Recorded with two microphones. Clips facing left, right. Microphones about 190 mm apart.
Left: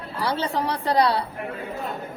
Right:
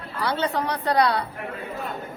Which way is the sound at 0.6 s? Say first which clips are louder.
Left 2 dB; 30° left (ahead or behind).